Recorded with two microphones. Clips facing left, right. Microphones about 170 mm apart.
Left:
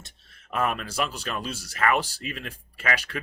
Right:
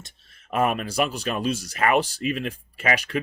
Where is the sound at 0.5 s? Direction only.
15° right (ahead or behind).